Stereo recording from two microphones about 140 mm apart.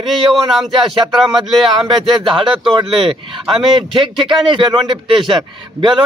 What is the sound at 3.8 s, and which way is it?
Speech, 35° right (ahead or behind).